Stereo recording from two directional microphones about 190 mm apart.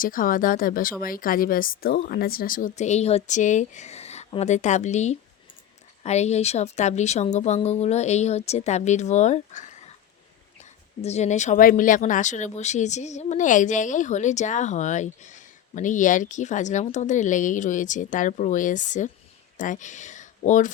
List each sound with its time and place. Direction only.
0.0 s speech: 45° left (ahead or behind)